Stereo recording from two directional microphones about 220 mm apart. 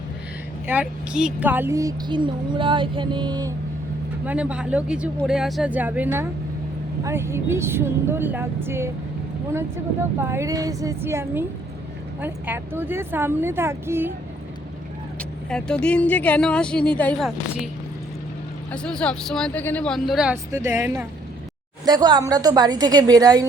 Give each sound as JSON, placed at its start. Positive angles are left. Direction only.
{"t": 0.7, "sound": "a woman's voice", "side_deg": -5}
{"t": 4.3, "sound": "a woman's voice", "side_deg": -5}
{"t": 15.2, "sound": "speech", "side_deg": 5}
{"t": 18.7, "sound": "a woman's voice", "side_deg": 5}